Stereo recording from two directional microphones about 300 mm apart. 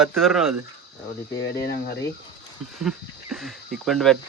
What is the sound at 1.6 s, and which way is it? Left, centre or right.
Speech, left.